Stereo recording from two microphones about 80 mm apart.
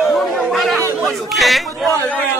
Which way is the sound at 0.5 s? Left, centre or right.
Centre.